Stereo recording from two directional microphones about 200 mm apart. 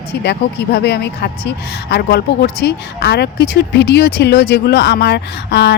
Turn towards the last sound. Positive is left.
turn(degrees=55)  # may be behind; listen again after turning